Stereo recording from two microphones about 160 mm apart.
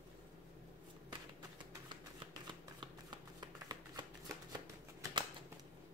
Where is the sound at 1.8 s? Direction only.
30° right (ahead or behind).